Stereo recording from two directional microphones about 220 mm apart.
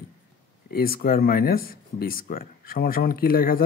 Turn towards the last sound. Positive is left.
turn(degrees=40)  # may be behind; listen again after turning